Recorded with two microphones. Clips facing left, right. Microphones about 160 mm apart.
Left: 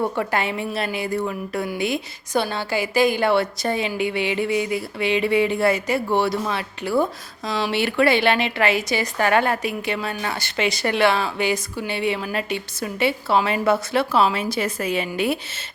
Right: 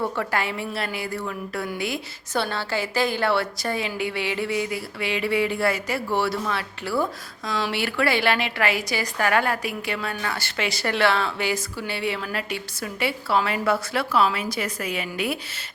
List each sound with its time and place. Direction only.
0.0 s a woman's voice: 20° left (ahead or behind)